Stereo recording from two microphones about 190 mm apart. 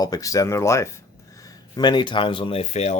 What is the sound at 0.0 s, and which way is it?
Speech, 20° left (ahead or behind).